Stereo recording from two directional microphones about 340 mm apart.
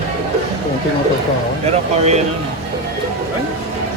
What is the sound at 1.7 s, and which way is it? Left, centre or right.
Speech, centre.